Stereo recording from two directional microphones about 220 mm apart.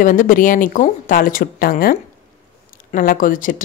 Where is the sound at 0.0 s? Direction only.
35° left (ahead or behind).